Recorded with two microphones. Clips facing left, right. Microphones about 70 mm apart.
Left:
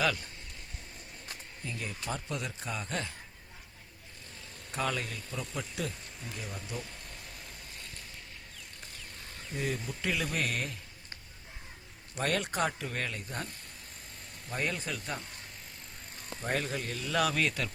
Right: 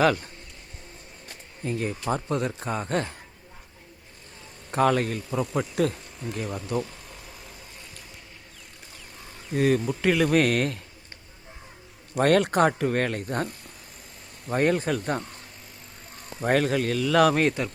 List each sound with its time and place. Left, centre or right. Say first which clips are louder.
0.0 s speech: right 9 dB; right
1.6 s speech: right 11 dB; right
4.7 s speech: right 12 dB; right
6.8 s a sound: right 3 dB; centre
9.6 s speech: right 13 dB; right
12.2 s speech: right 11 dB; right
16.4 s speech: right 11 dB; right